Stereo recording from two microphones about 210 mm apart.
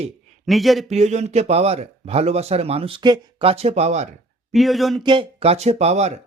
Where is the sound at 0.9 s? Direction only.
35° right (ahead or behind).